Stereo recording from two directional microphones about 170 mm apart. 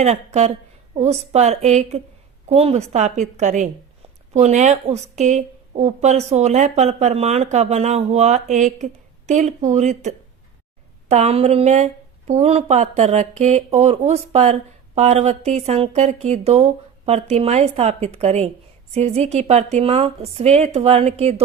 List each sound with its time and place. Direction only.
0.0 s speech: 40° right (ahead or behind)